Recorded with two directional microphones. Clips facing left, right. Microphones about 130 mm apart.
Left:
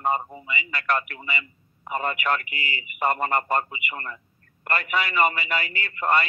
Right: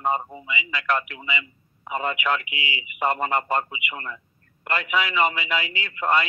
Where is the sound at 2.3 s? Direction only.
50° left (ahead or behind).